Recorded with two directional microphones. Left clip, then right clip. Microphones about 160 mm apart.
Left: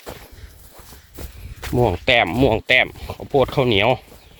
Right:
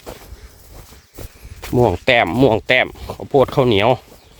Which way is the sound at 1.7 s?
40° right (ahead or behind).